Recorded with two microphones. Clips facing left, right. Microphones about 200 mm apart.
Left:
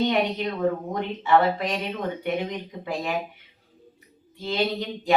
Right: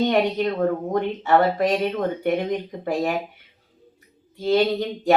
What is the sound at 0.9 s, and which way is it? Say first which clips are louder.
Speech: right 3 dB; 45° right (ahead or behind).